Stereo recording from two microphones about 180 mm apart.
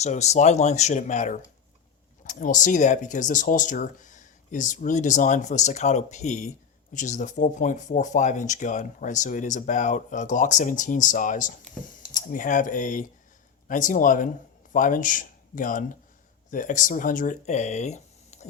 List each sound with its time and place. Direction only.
0.0 s speech: 40° left (ahead or behind)